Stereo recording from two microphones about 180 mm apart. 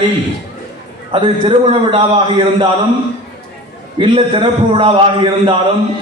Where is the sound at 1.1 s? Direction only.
30° right (ahead or behind).